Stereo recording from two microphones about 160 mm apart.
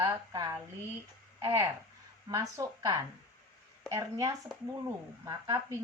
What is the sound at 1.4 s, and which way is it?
Speech, 20° right (ahead or behind).